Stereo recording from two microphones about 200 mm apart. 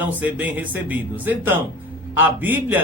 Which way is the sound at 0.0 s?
10° right (ahead or behind).